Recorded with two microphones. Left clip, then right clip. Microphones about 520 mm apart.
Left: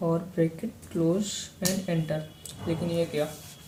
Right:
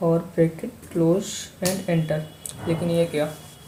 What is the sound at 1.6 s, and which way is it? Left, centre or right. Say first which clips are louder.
Speech: right 6 dB; left.